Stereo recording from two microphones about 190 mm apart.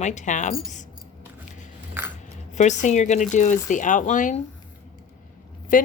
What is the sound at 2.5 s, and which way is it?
Speech, 40° left (ahead or behind).